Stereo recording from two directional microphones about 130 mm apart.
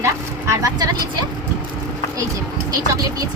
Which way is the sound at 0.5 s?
30° right (ahead or behind).